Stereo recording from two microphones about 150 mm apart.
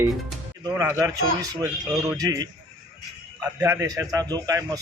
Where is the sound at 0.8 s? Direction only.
20° right (ahead or behind).